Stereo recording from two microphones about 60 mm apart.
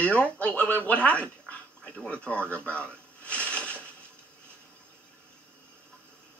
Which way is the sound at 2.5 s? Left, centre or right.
Left.